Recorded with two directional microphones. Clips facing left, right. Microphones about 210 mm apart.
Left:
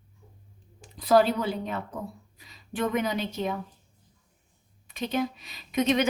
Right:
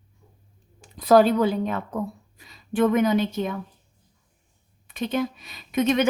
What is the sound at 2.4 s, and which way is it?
A woman's voice, 50° right (ahead or behind).